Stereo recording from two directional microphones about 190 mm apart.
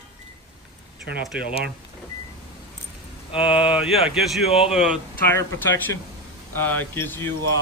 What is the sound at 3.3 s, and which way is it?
Speech, 30° left (ahead or behind).